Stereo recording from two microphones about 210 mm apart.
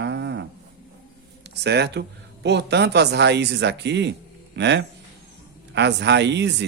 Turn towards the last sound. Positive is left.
turn(degrees=-55)  # may be behind; listen again after turning